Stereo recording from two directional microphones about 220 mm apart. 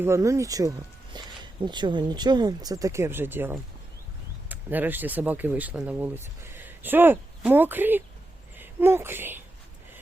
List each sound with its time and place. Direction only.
0.0 s speech: 15° right (ahead or behind)
1.1 s a sound: 20° right (ahead or behind)
1.6 s speech: 20° right (ahead or behind)